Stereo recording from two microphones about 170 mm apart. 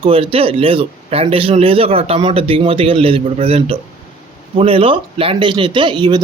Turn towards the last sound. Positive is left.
turn(degrees=-25)  # may be behind; listen again after turning